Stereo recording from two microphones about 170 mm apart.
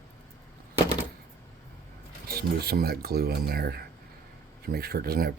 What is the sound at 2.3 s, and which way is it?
Speech, 65° right (ahead or behind).